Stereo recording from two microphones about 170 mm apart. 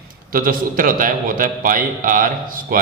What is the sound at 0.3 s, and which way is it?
A man's voice, 55° right (ahead or behind).